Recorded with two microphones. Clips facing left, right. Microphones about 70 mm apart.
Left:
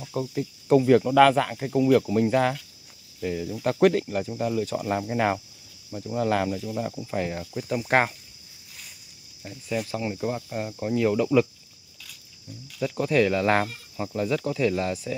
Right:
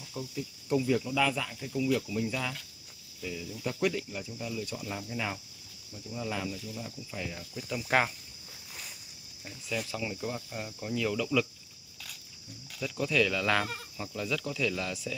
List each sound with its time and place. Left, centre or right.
0.0 s cricket: left
3.2 s speech: left
9.5 s speech: left
9.8 s speech: left
12.8 s speech: left